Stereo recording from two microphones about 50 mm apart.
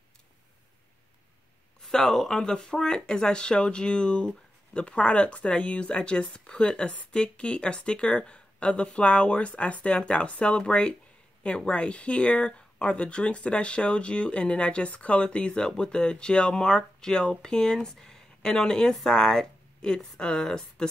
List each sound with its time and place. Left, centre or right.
1.8 s speech: centre